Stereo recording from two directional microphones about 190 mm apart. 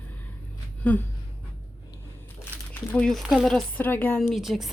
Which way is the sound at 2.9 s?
5° left (ahead or behind).